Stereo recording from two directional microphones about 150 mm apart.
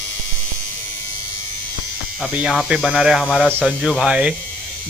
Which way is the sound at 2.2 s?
5° right (ahead or behind).